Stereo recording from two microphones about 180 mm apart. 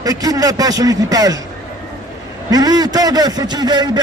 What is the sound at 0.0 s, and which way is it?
A man's voice, 20° right (ahead or behind).